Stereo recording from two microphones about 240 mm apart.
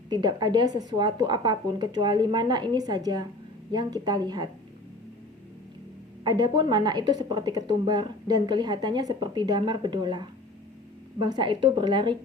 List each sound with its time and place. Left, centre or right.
0.1 s a woman's voice: centre
6.2 s a woman's voice: centre